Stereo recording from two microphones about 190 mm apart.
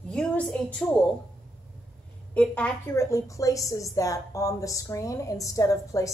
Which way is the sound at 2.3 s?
5° left (ahead or behind).